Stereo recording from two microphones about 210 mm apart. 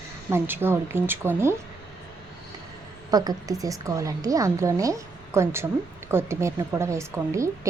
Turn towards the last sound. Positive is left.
turn(degrees=-15)  # may be behind; listen again after turning